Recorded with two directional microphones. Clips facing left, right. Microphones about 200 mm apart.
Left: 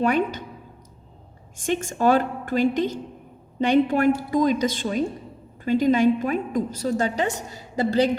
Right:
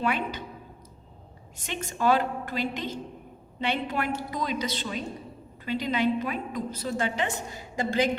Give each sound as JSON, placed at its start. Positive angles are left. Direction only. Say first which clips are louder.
{"t": 1.5, "sound": "a woman's voice", "louder": "left 9 dB", "side_deg": 45}